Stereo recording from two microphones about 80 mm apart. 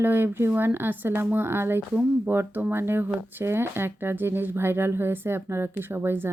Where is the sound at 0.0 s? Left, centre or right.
Right.